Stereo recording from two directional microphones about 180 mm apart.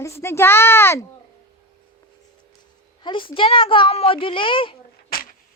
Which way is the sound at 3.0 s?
30° left (ahead or behind).